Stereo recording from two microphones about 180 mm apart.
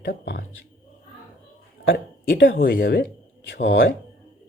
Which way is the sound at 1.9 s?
55° left (ahead or behind).